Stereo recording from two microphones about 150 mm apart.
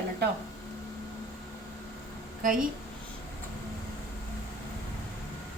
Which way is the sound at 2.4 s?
65° right (ahead or behind).